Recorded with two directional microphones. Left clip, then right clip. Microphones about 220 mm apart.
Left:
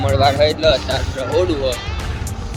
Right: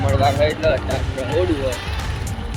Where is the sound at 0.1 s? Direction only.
25° left (ahead or behind).